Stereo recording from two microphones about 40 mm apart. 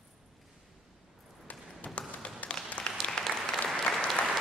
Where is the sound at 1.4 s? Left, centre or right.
Left.